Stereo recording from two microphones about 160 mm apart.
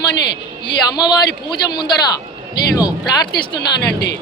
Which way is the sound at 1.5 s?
25° left (ahead or behind).